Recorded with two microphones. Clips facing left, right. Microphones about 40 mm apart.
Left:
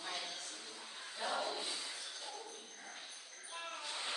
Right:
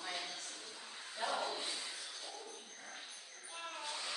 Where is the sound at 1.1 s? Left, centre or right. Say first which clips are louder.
Right 1 dB; centre.